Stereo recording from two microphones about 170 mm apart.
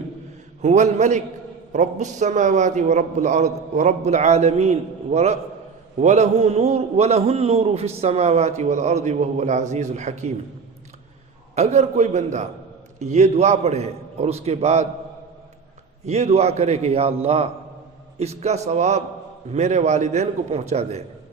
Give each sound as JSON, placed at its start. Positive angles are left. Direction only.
{"t": 0.6, "sound": "a man's voice", "side_deg": -40}
{"t": 11.5, "sound": "a man's voice", "side_deg": -40}
{"t": 16.0, "sound": "a man's voice", "side_deg": -40}